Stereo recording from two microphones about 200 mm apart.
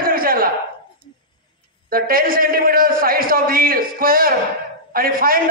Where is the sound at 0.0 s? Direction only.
45° right (ahead or behind).